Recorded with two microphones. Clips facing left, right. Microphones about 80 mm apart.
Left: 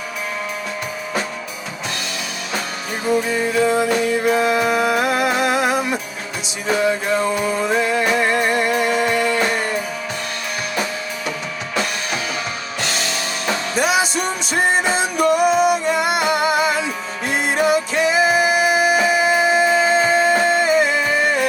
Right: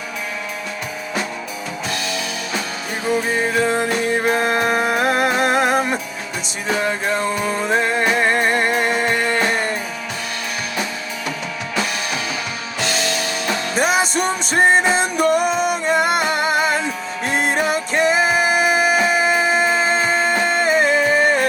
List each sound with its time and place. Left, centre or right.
4.1 s music: right
7.8 s music: right
13.7 s music: right